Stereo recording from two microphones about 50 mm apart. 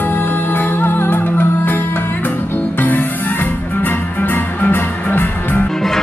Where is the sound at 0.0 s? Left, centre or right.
Left.